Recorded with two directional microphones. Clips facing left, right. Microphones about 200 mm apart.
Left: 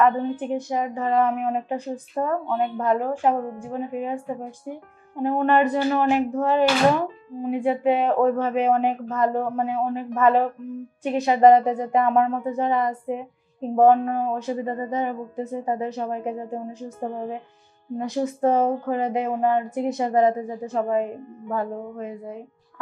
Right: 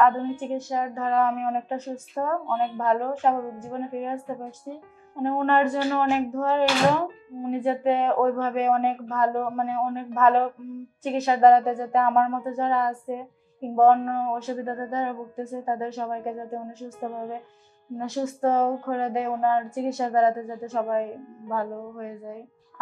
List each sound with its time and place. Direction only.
0.0 s a woman's voice: 15° left (ahead or behind)